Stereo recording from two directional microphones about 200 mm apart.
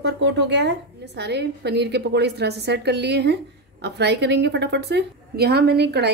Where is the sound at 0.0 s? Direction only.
60° right (ahead or behind).